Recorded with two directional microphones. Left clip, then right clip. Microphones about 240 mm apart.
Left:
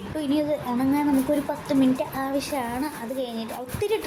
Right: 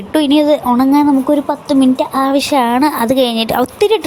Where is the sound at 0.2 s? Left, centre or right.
Right.